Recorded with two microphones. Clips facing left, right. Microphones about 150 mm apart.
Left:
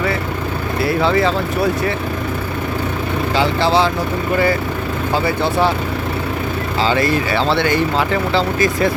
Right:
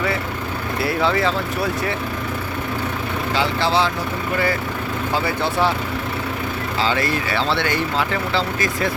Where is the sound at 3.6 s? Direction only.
35° left (ahead or behind).